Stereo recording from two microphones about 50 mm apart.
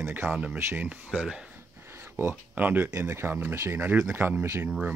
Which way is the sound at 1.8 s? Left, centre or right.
Right.